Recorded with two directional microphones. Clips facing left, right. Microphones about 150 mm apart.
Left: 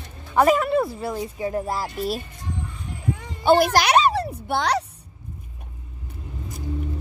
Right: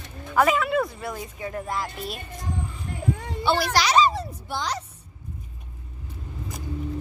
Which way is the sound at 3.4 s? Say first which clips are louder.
Left 7 dB; 45° left (ahead or behind).